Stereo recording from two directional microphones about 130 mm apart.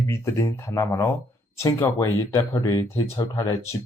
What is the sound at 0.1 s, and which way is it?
Speech, 20° left (ahead or behind).